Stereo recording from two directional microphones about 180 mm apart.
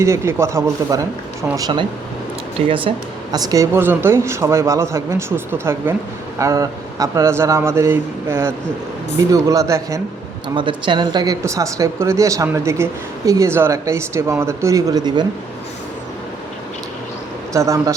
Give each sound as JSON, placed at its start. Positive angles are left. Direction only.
{"t": 0.0, "sound": "speech", "side_deg": -15}
{"t": 17.5, "sound": "speech", "side_deg": -15}